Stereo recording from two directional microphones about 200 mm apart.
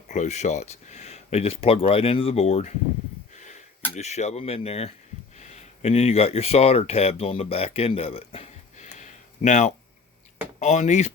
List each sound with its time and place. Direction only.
0.1 s speech: 35° left (ahead or behind)
3.9 s speech: 35° left (ahead or behind)